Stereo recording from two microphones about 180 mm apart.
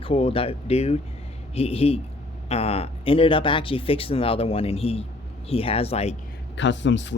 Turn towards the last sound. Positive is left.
turn(degrees=90)